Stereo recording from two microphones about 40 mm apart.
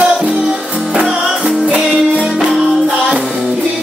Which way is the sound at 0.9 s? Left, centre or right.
Centre.